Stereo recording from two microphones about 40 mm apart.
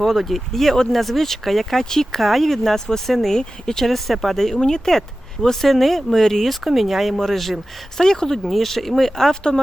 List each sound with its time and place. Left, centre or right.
0.0 s speech: centre
3.8 s speech: centre
6.7 s speech: centre
8.4 s speech: centre
9.3 s speech: centre